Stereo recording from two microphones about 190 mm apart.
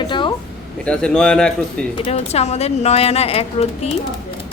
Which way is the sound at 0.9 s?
5° left (ahead or behind).